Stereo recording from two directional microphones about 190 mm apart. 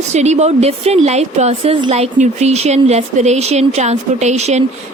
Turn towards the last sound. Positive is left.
turn(degrees=-35)  # may be behind; listen again after turning